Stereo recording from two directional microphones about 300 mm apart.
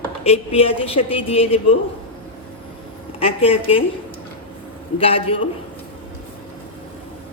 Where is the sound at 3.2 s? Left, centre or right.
Centre.